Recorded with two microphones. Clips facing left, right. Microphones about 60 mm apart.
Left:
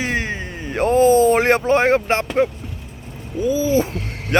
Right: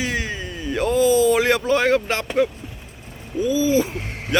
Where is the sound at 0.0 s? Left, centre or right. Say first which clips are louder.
Left 2 dB; left.